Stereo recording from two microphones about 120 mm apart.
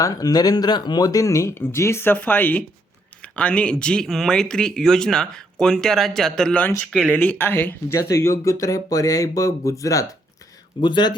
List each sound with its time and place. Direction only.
0.0 s speech: 30° left (ahead or behind)
10.8 s speech: 40° left (ahead or behind)